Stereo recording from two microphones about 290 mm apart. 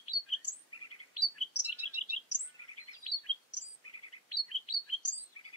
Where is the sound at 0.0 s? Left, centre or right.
Left.